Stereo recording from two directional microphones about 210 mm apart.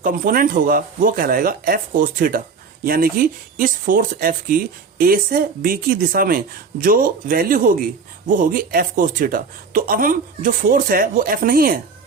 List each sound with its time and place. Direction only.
0.0 s a woman's voice: 40° right (ahead or behind)